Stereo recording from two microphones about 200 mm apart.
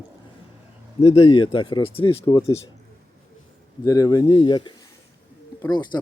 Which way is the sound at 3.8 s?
15° left (ahead or behind).